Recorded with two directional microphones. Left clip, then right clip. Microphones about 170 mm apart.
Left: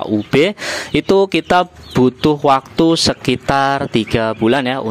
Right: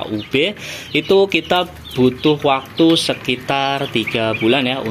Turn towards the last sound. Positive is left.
turn(degrees=40)  # may be behind; listen again after turning